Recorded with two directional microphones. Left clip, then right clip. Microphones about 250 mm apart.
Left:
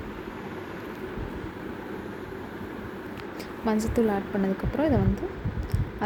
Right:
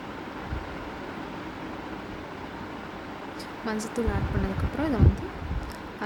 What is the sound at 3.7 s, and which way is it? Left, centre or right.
A woman's voice, centre.